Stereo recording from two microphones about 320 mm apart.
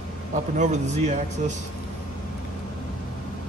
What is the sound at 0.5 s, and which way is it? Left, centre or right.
Speech, right.